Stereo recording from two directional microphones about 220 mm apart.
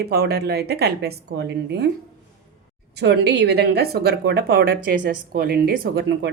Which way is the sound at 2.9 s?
50° right (ahead or behind).